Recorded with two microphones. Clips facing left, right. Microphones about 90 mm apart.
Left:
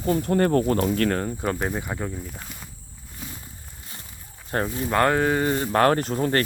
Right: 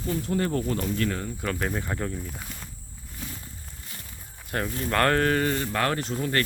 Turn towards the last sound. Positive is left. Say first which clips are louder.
# left 4 dB
turn(degrees=35)  # may be behind; listen again after turning